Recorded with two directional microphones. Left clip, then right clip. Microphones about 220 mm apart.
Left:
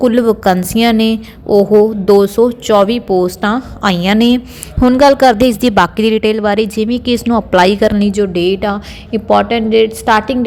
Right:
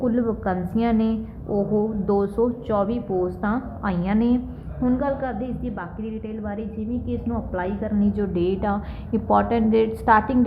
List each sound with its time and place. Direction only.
0.0 s a woman's voice: 40° left (ahead or behind)
4.9 s a woman's voice: 50° left (ahead or behind)
8.0 s a woman's voice: 30° left (ahead or behind)